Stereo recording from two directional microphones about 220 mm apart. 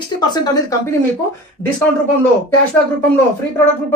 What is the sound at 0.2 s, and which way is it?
Speech, 20° left (ahead or behind).